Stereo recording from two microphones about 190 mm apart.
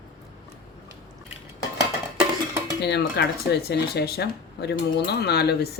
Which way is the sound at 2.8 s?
60° left (ahead or behind).